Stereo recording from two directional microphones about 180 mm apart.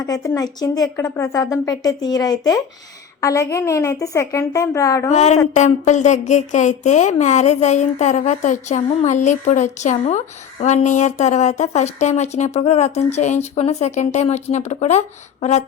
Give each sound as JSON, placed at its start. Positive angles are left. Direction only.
{"t": 0.0, "sound": "a woman's voice", "side_deg": 20}
{"t": 5.1, "sound": "speech", "side_deg": 40}